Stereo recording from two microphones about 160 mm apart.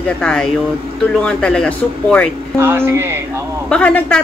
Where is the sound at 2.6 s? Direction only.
15° right (ahead or behind).